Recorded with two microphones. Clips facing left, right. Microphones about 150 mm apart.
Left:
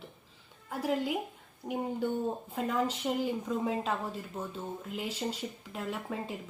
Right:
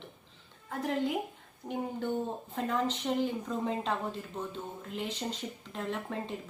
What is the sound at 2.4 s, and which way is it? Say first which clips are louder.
A woman's voice: right 2 dB; 5° left (ahead or behind).